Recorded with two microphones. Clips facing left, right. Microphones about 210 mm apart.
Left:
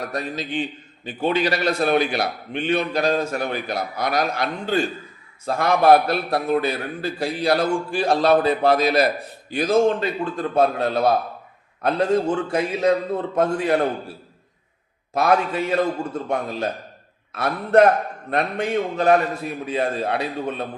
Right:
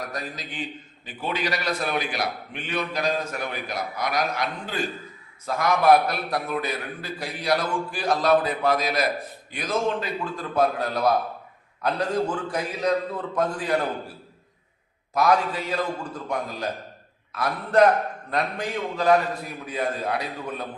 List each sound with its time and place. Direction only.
0.0 s a man's voice: 25° left (ahead or behind)
15.1 s a man's voice: 25° left (ahead or behind)